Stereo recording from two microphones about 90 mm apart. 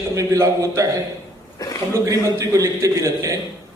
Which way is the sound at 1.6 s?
45° left (ahead or behind).